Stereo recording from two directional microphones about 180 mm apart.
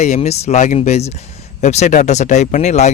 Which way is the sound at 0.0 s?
40° left (ahead or behind).